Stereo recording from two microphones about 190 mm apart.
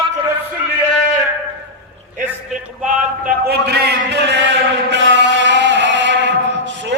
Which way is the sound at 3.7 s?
55° right (ahead or behind).